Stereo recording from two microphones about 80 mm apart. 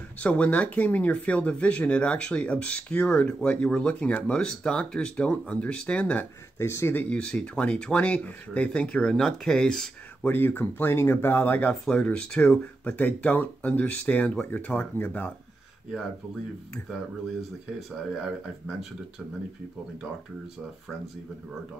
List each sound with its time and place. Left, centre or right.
0.2 s speech: centre
6.6 s speech: left
7.1 s speech: centre
10.2 s speech: left
11.8 s speech: centre
18.2 s speech: centre